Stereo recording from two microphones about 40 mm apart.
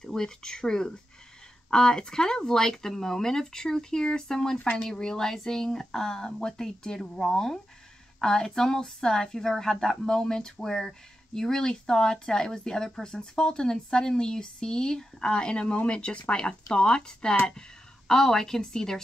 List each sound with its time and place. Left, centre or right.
0.0 s speech: centre